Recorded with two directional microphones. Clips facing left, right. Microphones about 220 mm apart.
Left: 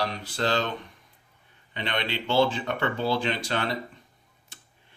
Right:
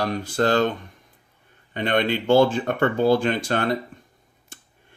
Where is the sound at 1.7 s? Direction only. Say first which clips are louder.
Right 9 dB; 50° right (ahead or behind).